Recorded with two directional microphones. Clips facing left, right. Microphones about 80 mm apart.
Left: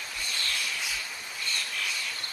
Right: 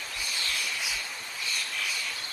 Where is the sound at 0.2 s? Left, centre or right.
Centre.